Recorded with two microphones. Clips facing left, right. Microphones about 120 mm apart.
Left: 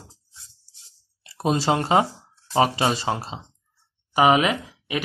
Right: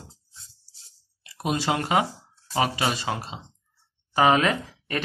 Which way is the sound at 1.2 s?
30° left (ahead or behind).